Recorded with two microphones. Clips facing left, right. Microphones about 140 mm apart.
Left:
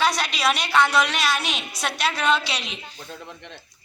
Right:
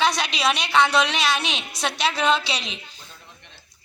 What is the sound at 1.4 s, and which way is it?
A woman's voice, 25° right (ahead or behind).